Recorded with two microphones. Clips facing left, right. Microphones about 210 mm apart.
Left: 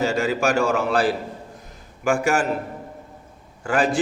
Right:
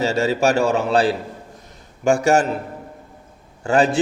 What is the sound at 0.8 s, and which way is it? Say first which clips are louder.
Speech: right 3 dB; 25° right (ahead or behind).